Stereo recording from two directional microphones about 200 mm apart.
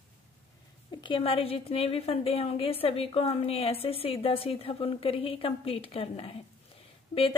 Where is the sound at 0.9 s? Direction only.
25° left (ahead or behind).